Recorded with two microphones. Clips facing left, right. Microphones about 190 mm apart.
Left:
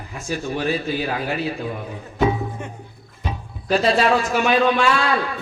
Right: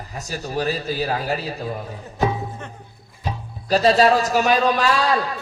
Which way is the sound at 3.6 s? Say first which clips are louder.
Right 2 dB; 40° right (ahead or behind).